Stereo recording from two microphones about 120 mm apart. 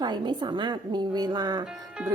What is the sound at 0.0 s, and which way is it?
Speech, 40° right (ahead or behind).